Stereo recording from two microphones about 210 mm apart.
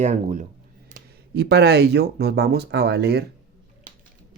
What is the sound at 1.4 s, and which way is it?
Speech, 50° right (ahead or behind).